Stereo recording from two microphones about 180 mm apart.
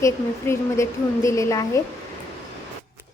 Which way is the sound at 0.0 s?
15° left (ahead or behind).